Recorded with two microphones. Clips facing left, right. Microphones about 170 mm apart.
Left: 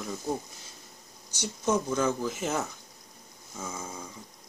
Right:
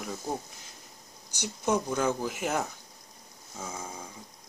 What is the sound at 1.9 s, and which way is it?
Speech, 65° right (ahead or behind).